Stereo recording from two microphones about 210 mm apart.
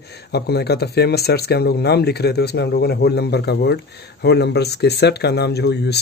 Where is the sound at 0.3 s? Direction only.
50° left (ahead or behind).